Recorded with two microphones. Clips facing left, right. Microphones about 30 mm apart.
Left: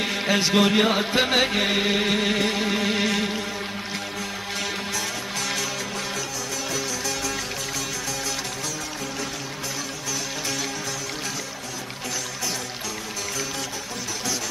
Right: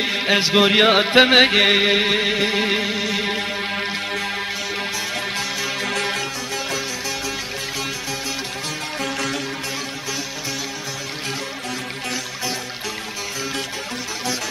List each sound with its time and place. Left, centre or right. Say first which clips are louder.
0.0 s speech: right 4 dB; right
0.7 s music: right 5 dB; right
1.8 s music: right 5 dB; right
2.5 s music: right 5 dB; right
2.8 s music: right 1 dB; centre
5.9 s music: right 6 dB; right